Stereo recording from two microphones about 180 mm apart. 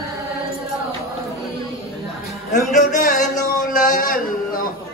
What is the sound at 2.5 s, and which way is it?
Music, 45° left (ahead or behind).